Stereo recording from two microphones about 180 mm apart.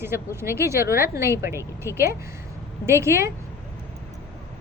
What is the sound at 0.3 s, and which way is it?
A woman's voice, 15° right (ahead or behind).